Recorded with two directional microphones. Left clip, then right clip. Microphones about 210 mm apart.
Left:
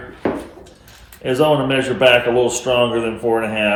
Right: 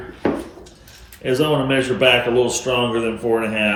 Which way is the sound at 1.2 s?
20° left (ahead or behind).